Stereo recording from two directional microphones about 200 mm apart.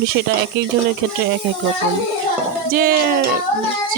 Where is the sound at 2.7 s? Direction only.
45° right (ahead or behind).